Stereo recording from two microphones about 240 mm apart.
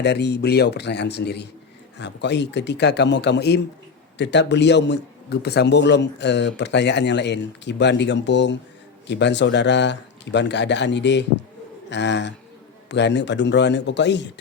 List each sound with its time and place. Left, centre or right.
0.0 s a man's voice: left